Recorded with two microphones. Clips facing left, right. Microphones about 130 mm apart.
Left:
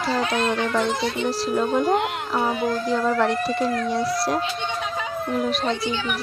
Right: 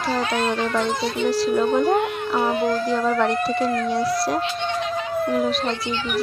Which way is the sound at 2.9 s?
Centre (ahead or behind).